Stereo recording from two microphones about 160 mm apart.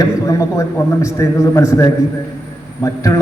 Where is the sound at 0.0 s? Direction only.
20° left (ahead or behind).